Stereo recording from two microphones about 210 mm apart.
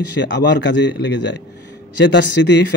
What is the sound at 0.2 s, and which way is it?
Speech, 55° left (ahead or behind).